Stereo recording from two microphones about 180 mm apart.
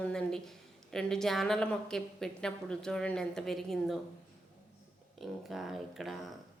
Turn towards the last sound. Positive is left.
turn(degrees=0)  # may be behind; listen again after turning